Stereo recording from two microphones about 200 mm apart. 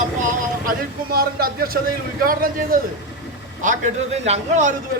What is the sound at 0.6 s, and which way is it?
A man's voice, 45° right (ahead or behind).